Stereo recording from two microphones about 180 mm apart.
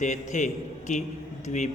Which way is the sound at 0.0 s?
45° left (ahead or behind).